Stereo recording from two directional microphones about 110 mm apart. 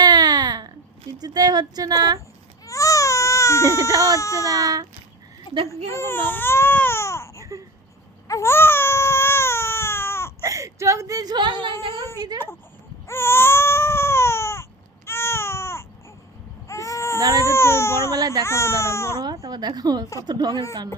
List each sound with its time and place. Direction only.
0.0 s baby cry: 40° right (ahead or behind)
1.2 s speech: 40° right (ahead or behind)
2.6 s baby cry: 30° left (ahead or behind)
4.2 s speech: 30° left (ahead or behind)
4.4 s speech: 35° right (ahead or behind)
5.6 s speech: 25° left (ahead or behind)
8.3 s baby cry: 25° left (ahead or behind)
10.4 s speech: 30° right (ahead or behind); by 11.7 s 45° right (ahead or behind)
13.1 s baby cry: 20° left (ahead or behind)
19.2 s a sound: 40° right (ahead or behind)
20.2 s speech: 40° right (ahead or behind)